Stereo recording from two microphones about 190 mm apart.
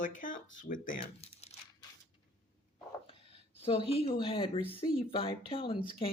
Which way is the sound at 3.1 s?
30° left (ahead or behind).